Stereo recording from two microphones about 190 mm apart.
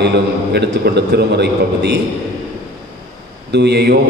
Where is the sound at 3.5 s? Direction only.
60° right (ahead or behind).